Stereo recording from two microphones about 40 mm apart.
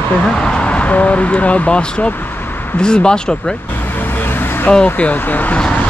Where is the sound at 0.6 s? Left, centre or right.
Left.